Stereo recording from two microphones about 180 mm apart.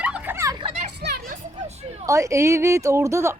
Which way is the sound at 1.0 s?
65° right (ahead or behind).